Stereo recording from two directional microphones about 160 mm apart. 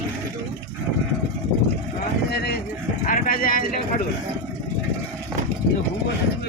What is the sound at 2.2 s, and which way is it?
Speech, 90° left.